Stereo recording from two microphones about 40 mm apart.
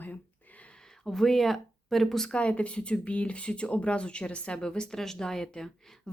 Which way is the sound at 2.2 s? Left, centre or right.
Left.